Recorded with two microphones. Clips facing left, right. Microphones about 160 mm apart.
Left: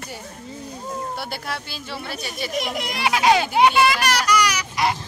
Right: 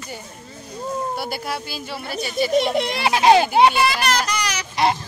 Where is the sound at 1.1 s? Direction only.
5° right (ahead or behind).